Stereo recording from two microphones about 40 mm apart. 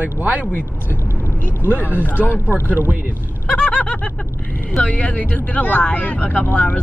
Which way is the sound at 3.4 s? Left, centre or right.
Left.